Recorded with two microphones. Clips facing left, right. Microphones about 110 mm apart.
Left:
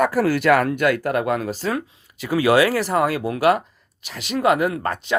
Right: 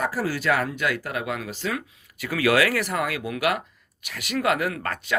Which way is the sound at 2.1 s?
25° left (ahead or behind).